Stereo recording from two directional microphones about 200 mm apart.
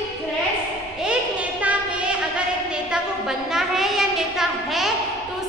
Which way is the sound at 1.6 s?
5° right (ahead or behind).